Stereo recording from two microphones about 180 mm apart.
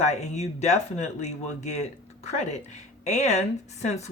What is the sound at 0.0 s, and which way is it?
Speech, 40° left (ahead or behind).